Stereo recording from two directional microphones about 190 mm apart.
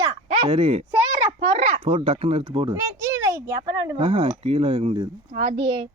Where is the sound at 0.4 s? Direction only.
30° right (ahead or behind).